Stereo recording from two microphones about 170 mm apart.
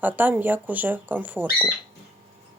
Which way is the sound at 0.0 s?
10° right (ahead or behind).